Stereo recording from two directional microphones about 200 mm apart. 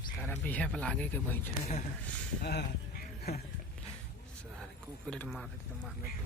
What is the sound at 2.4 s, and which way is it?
Speech, 55° left (ahead or behind).